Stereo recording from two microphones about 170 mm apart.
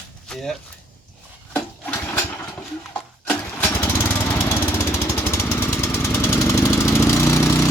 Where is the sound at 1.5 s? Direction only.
15° left (ahead or behind).